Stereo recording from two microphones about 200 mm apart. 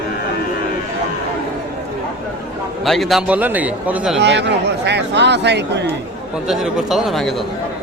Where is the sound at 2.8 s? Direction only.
Centre (ahead or behind).